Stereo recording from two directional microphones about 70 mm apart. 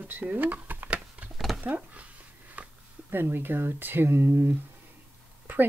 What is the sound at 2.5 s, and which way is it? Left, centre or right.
Speech, right.